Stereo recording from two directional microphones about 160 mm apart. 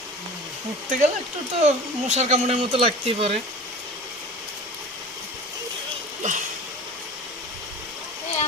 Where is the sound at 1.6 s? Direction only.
40° right (ahead or behind).